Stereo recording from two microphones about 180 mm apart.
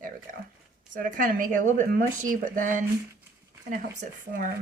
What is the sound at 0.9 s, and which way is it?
Speech, 50° right (ahead or behind).